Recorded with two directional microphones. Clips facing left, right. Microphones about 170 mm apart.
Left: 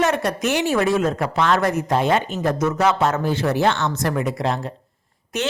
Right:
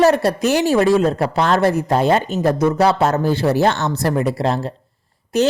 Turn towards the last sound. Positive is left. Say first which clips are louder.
# right 8 dB
turn(degrees=-35)  # may be behind; listen again after turning